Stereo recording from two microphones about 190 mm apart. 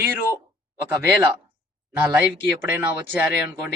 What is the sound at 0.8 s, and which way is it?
Speech, 10° right (ahead or behind).